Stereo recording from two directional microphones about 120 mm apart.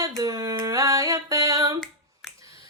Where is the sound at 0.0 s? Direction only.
30° right (ahead or behind).